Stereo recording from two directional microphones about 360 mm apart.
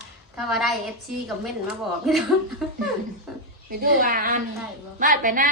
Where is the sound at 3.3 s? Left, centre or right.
Centre.